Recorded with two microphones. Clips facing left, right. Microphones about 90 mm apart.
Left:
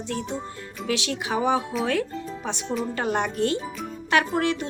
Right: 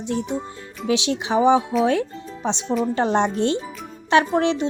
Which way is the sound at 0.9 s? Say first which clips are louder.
Right 5 dB; 20° right (ahead or behind).